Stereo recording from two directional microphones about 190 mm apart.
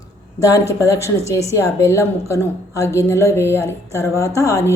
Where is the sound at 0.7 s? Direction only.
15° left (ahead or behind).